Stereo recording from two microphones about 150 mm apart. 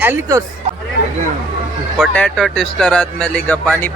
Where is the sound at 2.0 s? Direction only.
5° left (ahead or behind).